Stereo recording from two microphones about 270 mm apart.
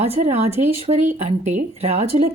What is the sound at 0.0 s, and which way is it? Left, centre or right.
A woman's voice, right.